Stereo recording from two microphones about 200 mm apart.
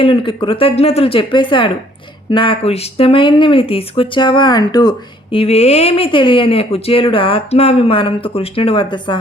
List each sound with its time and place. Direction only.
0.0 s speech: 25° left (ahead or behind)